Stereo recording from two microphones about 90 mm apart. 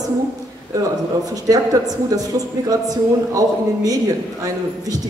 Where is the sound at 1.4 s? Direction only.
45° right (ahead or behind).